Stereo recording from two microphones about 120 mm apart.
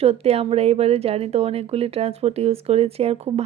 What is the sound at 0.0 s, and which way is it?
Speech, 55° right (ahead or behind).